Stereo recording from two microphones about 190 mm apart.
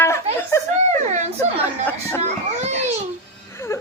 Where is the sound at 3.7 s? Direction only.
15° left (ahead or behind).